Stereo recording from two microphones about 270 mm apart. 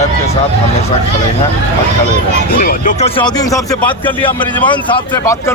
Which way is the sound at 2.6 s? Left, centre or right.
Left.